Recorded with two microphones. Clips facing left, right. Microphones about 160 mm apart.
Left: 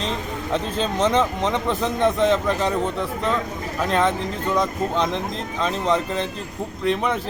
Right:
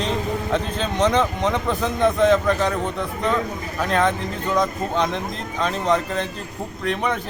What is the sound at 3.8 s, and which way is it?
Speech, centre (ahead or behind).